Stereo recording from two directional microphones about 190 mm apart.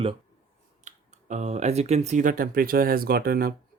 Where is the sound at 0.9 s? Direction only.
40° right (ahead or behind).